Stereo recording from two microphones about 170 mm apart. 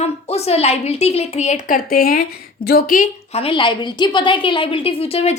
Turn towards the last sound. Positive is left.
turn(degrees=35)  # may be behind; listen again after turning